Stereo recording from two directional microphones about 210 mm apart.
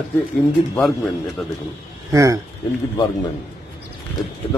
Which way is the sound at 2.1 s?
15° right (ahead or behind).